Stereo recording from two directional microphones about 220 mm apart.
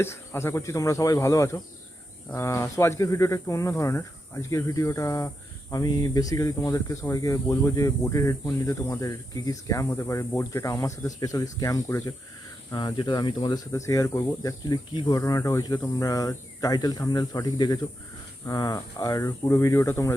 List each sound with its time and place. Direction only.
0.0 s speech: 10° left (ahead or behind)